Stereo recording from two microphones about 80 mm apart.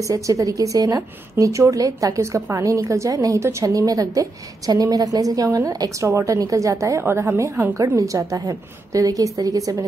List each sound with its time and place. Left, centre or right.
0.0 s a woman's voice: right